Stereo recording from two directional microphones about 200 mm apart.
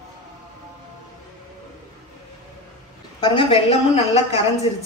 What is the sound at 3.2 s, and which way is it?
Speech, 25° left (ahead or behind).